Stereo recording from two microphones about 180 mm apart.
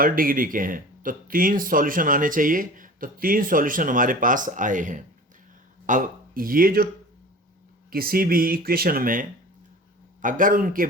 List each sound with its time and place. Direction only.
0.0 s speech: 50° right (ahead or behind)
7.9 s speech: 55° right (ahead or behind)